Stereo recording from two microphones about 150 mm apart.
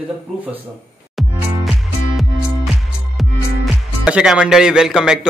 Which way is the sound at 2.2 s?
Centre (ahead or behind).